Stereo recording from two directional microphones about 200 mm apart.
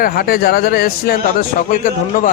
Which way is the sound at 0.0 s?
50° left (ahead or behind).